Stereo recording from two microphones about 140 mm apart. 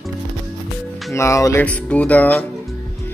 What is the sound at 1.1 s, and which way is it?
Speech, 20° left (ahead or behind).